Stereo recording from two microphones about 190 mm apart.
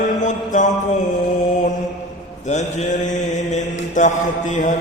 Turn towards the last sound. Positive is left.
turn(degrees=40)  # may be behind; listen again after turning